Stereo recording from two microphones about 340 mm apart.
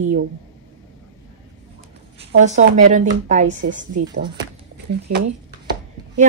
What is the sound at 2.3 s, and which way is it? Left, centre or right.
Speech, right.